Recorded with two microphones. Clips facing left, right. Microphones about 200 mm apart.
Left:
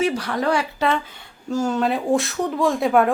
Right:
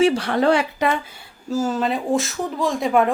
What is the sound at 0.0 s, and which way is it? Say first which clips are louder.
Speech: right 4 dB; 25° right (ahead or behind).